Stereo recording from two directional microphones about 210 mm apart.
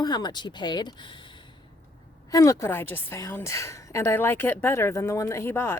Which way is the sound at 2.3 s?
15° left (ahead or behind).